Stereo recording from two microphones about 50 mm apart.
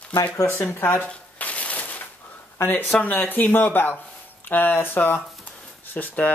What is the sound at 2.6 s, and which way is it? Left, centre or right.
Speech, left.